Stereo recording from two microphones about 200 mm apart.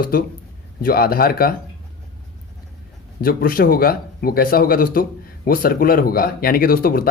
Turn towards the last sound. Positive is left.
turn(degrees=45)  # may be behind; listen again after turning